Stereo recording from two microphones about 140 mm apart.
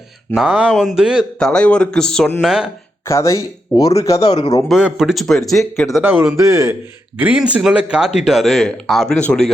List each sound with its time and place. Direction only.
0.3 s speech: 5° right (ahead or behind)
1.4 s speech: 5° left (ahead or behind)
3.0 s speech: 20° left (ahead or behind)
4.7 s speech: 5° right (ahead or behind)
6.0 s a man's voice: 15° right (ahead or behind)
7.2 s speech: 10° right (ahead or behind); by 9.5 s 5° left (ahead or behind)